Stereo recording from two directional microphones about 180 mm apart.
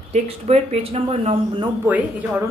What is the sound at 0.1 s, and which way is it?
Speech, 40° right (ahead or behind).